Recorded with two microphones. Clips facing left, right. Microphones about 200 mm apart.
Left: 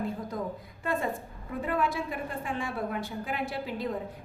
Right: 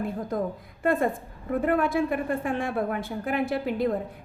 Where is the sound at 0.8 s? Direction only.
55° right (ahead or behind).